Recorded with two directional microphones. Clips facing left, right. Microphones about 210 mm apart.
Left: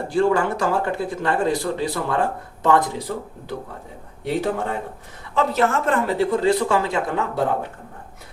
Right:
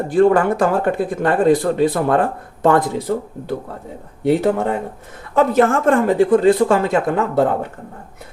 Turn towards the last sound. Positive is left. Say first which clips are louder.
# right 6 dB
turn(degrees=-50)  # may be behind; listen again after turning